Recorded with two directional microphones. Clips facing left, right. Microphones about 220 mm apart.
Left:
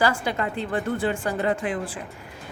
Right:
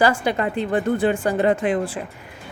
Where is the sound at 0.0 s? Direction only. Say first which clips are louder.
Right 5 dB; 20° right (ahead or behind).